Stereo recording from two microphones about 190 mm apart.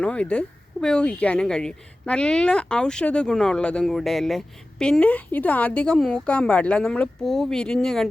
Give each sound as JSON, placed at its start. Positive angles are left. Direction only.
{"t": 0.0, "sound": "speech", "side_deg": 5}